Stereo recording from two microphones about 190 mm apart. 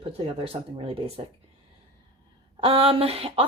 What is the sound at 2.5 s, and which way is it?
Speech, 30° right (ahead or behind).